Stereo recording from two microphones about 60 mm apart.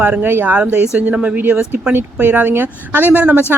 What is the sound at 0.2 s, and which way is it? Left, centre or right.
Speech, right.